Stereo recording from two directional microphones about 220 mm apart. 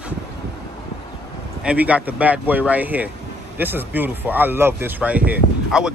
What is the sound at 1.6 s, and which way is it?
Speech, 5° right (ahead or behind).